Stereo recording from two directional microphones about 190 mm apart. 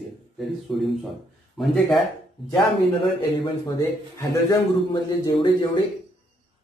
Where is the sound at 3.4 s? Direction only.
15° left (ahead or behind).